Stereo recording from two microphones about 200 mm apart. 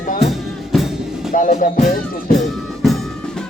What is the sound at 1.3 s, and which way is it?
Music, 40° left (ahead or behind).